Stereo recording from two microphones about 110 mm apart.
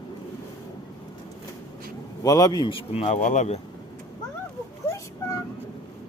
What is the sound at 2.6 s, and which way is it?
Speech, 60° left (ahead or behind).